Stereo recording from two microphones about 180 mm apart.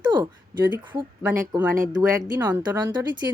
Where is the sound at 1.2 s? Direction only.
10° right (ahead or behind).